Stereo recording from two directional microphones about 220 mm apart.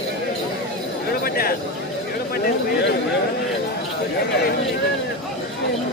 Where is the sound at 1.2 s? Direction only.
45° left (ahead or behind).